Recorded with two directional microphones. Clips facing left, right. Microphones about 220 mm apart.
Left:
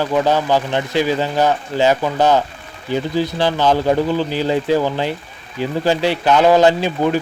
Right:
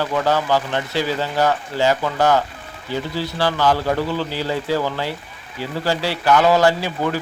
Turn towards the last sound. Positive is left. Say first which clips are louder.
# left 4 dB
turn(degrees=20)  # may be behind; listen again after turning